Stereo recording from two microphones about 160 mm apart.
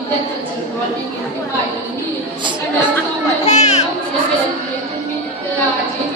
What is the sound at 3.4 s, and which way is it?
Chatter, 45° left (ahead or behind).